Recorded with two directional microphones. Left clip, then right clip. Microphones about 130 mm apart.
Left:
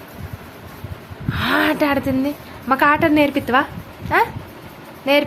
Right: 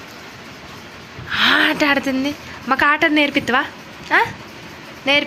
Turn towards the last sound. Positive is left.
turn(degrees=10)  # may be behind; listen again after turning